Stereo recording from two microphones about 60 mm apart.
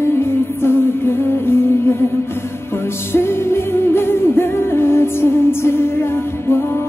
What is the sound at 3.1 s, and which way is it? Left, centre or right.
Music, left.